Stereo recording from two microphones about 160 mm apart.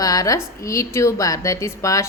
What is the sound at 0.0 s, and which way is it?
A woman's voice, 20° left (ahead or behind).